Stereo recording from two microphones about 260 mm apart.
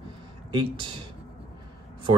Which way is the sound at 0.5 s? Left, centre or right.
Centre.